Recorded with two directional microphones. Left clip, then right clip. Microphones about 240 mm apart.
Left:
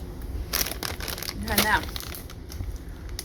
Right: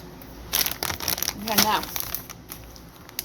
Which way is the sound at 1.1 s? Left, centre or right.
Right.